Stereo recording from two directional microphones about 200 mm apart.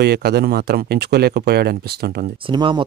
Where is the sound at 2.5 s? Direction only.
25° right (ahead or behind).